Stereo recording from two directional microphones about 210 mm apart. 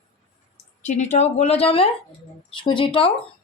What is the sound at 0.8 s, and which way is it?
Speech, 35° left (ahead or behind).